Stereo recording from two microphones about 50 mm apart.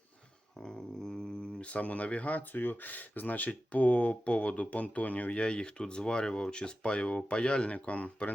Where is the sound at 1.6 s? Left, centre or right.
Left.